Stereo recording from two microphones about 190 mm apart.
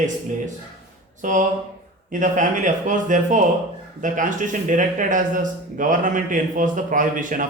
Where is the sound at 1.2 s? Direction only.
40° right (ahead or behind).